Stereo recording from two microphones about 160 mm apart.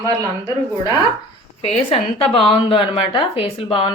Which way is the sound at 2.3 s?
35° left (ahead or behind).